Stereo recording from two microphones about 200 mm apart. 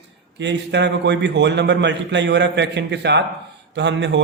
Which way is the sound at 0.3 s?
60° right (ahead or behind).